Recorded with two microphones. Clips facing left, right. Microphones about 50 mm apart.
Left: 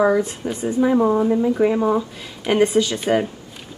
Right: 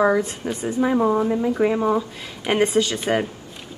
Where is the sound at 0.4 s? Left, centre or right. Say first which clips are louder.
Left 1 dB; right.